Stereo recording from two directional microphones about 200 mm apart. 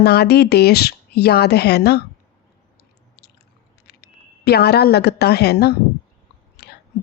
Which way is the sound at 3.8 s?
55° left (ahead or behind).